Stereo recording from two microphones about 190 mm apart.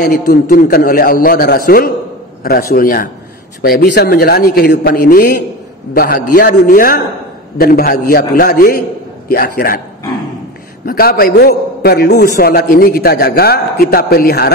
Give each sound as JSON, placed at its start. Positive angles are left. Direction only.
{"t": 0.0, "sound": "a man's voice", "side_deg": 50}
{"t": 3.6, "sound": "a man's voice", "side_deg": 60}
{"t": 10.9, "sound": "a man's voice", "side_deg": 50}